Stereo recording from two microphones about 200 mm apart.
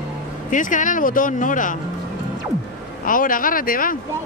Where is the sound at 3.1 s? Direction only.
45° left (ahead or behind).